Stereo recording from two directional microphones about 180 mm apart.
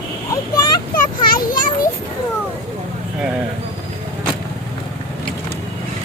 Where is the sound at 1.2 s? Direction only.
50° left (ahead or behind).